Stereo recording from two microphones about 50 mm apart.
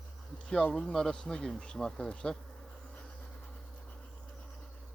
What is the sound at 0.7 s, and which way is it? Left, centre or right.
Speech, centre.